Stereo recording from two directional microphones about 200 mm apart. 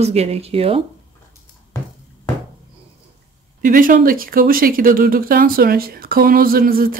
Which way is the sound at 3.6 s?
45° right (ahead or behind).